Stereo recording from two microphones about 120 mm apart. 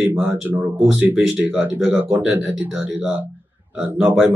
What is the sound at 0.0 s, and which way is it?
Speech, 15° right (ahead or behind).